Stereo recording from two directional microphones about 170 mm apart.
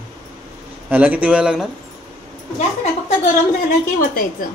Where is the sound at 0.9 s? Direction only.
10° right (ahead or behind).